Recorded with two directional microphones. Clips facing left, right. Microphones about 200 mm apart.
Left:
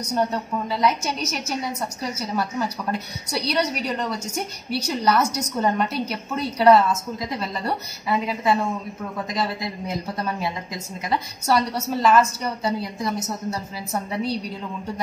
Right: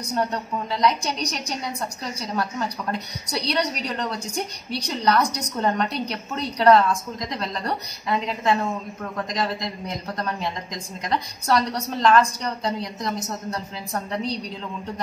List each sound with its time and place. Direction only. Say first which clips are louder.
0.1 s a woman's voice: left 2 dB; 5° left (ahead or behind)